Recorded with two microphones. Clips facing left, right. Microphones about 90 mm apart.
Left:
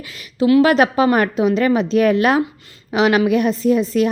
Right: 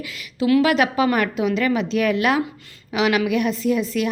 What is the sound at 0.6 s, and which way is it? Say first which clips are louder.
A woman's voice: left 4 dB; 35° left (ahead or behind).